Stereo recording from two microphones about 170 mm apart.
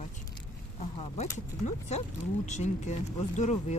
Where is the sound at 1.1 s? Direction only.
45° left (ahead or behind).